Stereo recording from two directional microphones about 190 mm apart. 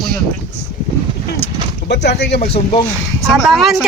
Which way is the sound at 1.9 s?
65° left (ahead or behind).